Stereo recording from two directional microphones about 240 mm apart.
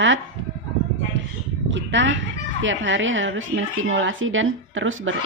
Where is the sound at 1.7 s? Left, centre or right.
Right.